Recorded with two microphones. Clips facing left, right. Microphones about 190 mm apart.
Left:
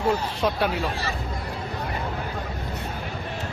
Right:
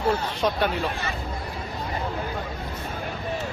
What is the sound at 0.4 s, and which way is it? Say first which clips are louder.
Speech: even; 5° left (ahead or behind).